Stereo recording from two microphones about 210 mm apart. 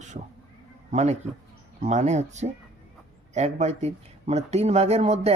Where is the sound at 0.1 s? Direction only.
30° right (ahead or behind).